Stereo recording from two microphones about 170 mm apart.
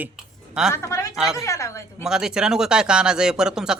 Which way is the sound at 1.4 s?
15° left (ahead or behind).